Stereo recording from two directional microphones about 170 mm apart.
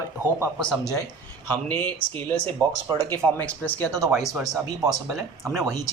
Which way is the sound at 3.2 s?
10° left (ahead or behind).